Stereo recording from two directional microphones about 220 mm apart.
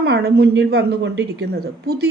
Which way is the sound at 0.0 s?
45° right (ahead or behind).